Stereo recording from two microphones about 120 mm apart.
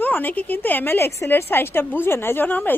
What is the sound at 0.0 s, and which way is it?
A woman's voice, 15° left (ahead or behind).